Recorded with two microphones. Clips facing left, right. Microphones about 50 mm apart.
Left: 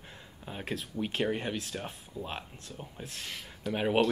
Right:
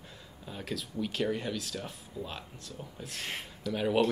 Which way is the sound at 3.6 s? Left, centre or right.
Left.